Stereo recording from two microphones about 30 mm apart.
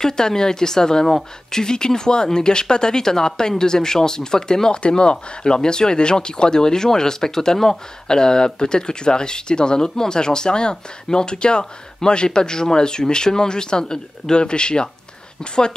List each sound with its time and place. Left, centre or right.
0.0 s speech: left
4.7 s speech: left